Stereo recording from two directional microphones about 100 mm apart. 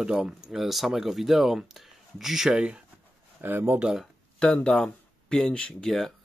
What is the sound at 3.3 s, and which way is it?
Speech, 20° right (ahead or behind).